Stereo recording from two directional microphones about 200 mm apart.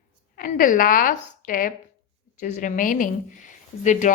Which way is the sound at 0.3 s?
45° left (ahead or behind).